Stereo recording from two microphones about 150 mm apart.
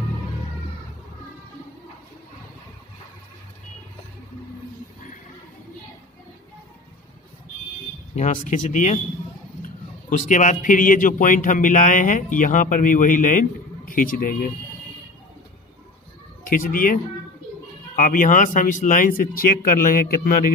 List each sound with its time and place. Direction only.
8.2 s a man's voice: 55° left (ahead or behind)
16.4 s a man's voice: 65° left (ahead or behind)